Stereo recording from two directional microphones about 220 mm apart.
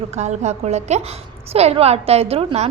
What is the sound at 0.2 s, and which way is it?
A woman's voice, 30° right (ahead or behind).